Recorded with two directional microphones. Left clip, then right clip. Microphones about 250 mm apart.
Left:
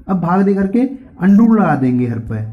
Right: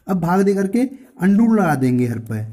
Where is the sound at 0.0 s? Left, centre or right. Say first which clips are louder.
Left 2 dB; right.